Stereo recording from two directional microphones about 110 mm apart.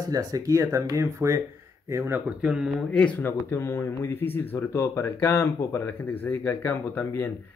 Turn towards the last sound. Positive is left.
turn(degrees=20)  # may be behind; listen again after turning